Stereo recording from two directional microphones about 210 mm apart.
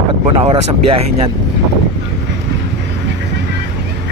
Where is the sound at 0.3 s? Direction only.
25° right (ahead or behind).